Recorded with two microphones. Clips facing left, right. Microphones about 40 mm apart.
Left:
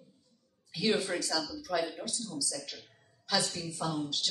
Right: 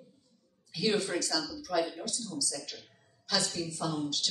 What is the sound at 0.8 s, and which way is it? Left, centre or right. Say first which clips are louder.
A woman's voice: even; centre.